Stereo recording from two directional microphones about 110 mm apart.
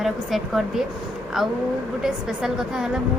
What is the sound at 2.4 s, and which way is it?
Speech, 5° right (ahead or behind).